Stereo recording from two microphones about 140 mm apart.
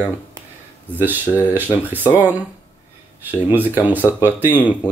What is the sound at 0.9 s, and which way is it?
Speech, 15° right (ahead or behind).